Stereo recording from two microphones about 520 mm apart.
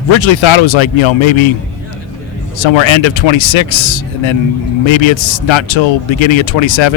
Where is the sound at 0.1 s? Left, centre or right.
Left.